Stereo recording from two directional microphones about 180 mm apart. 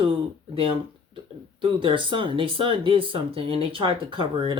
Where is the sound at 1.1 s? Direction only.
30° right (ahead or behind).